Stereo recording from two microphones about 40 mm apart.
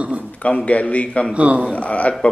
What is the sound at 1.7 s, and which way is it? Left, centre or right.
Speech, left.